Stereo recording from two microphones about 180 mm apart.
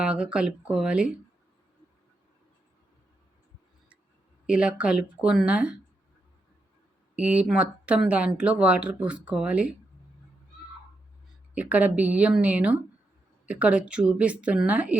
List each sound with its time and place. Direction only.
0.0 s speech: 5° right (ahead or behind)
4.4 s speech: 5° right (ahead or behind)
7.2 s speech: 5° right (ahead or behind)
11.5 s speech: 10° right (ahead or behind)